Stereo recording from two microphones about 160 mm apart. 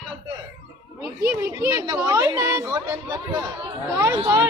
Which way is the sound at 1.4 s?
20° right (ahead or behind).